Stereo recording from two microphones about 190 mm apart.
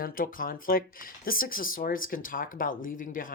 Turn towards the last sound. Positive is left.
turn(degrees=45)  # may be behind; listen again after turning